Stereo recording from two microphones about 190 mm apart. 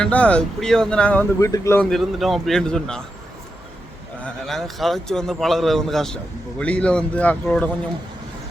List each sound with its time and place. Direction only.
0.0 s speech: 5° left (ahead or behind)
1.4 s a man's voice: 15° left (ahead or behind)
1.9 s speech: centre (ahead or behind)
4.4 s a man's voice: centre (ahead or behind)